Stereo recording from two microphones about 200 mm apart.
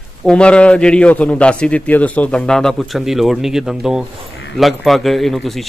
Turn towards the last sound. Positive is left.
turn(degrees=0)  # may be behind; listen again after turning